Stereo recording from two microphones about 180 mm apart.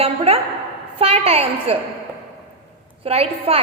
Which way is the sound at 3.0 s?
35° right (ahead or behind).